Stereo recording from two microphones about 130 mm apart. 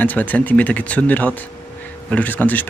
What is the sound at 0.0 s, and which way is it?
Speech, 15° left (ahead or behind).